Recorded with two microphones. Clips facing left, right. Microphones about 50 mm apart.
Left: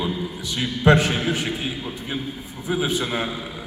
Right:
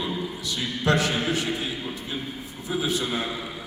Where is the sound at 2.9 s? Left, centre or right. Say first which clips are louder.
Left 2 dB; left.